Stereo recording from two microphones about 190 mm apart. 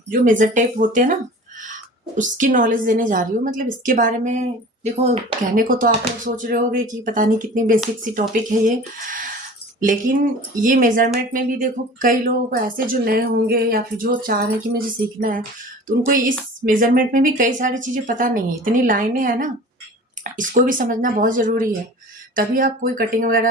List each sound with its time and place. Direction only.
0.1 s speech: 45° right (ahead or behind)
2.1 s speech: 40° right (ahead or behind)
5.5 s speech: 45° right (ahead or behind)
9.8 s speech: 45° right (ahead or behind)